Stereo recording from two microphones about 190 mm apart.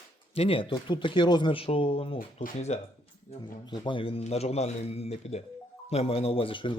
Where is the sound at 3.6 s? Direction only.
25° left (ahead or behind).